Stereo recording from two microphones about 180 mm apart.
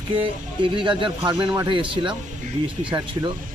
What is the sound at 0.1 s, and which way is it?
Speech, 25° right (ahead or behind).